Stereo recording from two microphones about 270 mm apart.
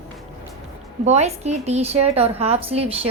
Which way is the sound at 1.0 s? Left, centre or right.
Right.